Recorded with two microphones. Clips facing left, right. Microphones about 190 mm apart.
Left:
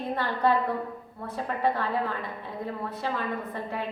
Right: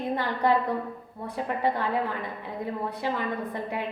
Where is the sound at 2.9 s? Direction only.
15° right (ahead or behind).